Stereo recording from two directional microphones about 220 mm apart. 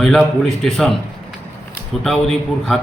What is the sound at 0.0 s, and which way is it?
Speech, centre (ahead or behind).